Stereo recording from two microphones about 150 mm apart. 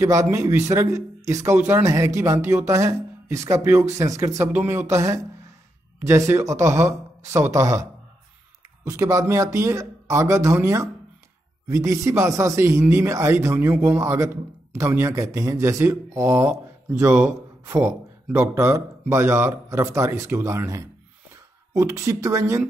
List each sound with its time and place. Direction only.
0.0 s a man's voice: 20° right (ahead or behind)
8.8 s a man's voice: 20° right (ahead or behind)